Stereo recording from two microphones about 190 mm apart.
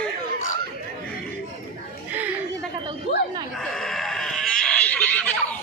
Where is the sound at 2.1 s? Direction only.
10° right (ahead or behind).